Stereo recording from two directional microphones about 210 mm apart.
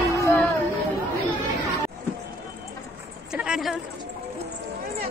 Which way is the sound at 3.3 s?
5° right (ahead or behind).